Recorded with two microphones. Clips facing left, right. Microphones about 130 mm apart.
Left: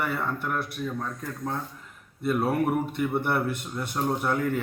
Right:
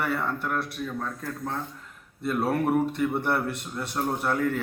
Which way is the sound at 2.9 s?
Centre (ahead or behind).